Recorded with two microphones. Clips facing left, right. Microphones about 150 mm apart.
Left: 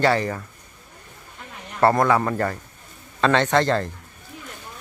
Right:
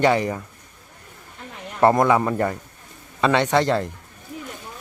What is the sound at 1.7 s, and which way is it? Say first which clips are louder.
A man's voice: right 1 dB; 20° right (ahead or behind).